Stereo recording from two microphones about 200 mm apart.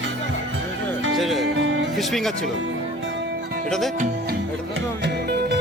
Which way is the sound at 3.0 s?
65° right (ahead or behind).